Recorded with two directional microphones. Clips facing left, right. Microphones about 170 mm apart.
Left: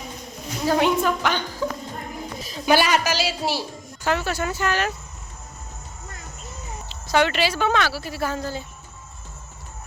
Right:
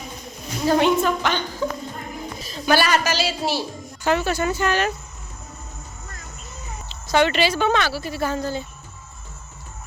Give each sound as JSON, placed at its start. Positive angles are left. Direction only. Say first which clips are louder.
{"t": 0.6, "sound": "a woman's voice", "louder": "right 2 dB", "side_deg": 5}
{"t": 6.8, "sound": "speech", "louder": "right 1 dB", "side_deg": 5}